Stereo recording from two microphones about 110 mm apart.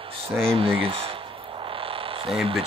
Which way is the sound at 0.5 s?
60° right (ahead or behind).